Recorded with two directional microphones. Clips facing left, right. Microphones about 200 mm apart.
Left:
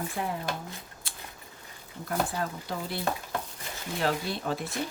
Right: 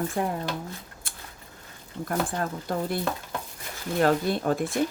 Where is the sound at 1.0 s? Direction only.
50° right (ahead or behind).